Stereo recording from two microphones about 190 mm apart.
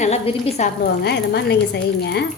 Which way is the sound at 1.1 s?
60° left (ahead or behind).